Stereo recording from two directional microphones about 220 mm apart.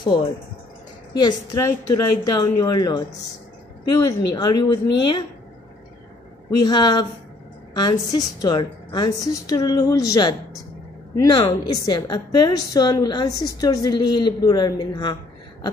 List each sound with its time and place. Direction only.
0.0 s a woman's voice: 20° left (ahead or behind)
6.5 s a woman's voice: 20° left (ahead or behind)